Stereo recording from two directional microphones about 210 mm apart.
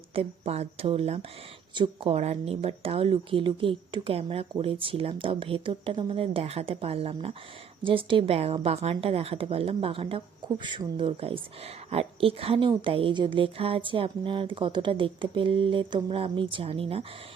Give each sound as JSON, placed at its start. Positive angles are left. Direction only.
{"t": 0.1, "sound": "speech", "side_deg": -30}